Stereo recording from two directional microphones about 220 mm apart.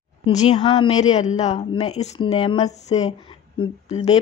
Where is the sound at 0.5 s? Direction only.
20° left (ahead or behind).